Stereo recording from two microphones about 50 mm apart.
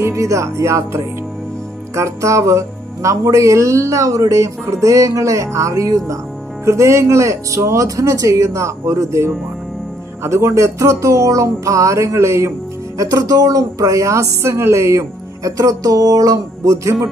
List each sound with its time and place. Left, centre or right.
0.1 s speech: right
2.0 s music: right
6.6 s speech: right
10.2 s music: right